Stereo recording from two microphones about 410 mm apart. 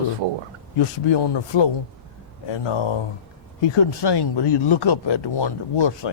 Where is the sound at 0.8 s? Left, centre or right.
Left.